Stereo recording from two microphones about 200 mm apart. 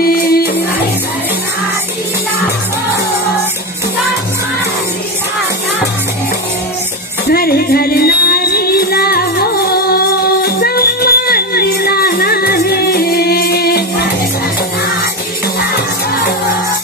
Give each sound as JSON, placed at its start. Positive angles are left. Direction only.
{"t": 0.0, "sound": "music", "side_deg": 50}
{"t": 7.2, "sound": "music", "side_deg": 50}